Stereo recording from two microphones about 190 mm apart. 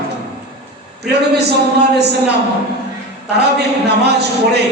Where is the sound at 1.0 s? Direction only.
60° right (ahead or behind).